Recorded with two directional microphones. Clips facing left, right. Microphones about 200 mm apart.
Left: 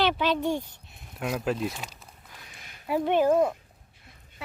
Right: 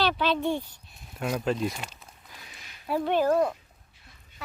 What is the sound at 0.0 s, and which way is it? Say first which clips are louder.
Speech: left 1 dB; 15° left (ahead or behind).